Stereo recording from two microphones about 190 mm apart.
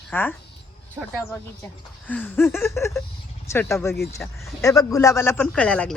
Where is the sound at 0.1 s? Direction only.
10° left (ahead or behind).